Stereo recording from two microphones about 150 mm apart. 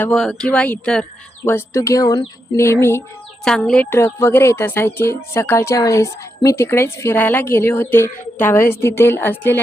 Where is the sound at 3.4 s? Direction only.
5° left (ahead or behind).